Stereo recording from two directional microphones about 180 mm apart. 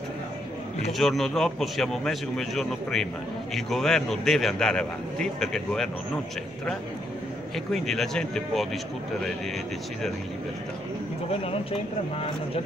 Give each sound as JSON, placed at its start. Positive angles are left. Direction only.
{"t": 0.9, "sound": "a man's voice", "side_deg": 0}
{"t": 7.5, "sound": "a man's voice", "side_deg": 0}
{"t": 11.4, "sound": "speech", "side_deg": 35}